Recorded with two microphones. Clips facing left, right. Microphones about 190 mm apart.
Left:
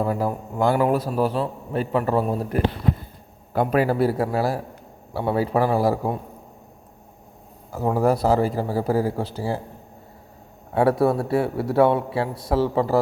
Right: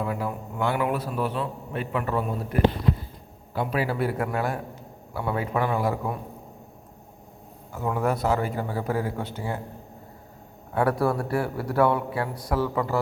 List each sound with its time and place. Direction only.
0.0 s a man's voice: 35° left (ahead or behind)
3.5 s a man's voice: 50° left (ahead or behind); by 6.1 s 35° left (ahead or behind)
7.7 s a man's voice: 35° left (ahead or behind)
10.8 s speech: 25° left (ahead or behind)